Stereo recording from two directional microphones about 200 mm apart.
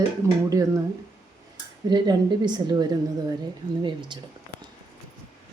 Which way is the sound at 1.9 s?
20° right (ahead or behind).